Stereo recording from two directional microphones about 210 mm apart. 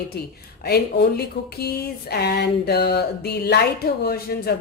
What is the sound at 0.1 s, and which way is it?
Speech, 50° left (ahead or behind).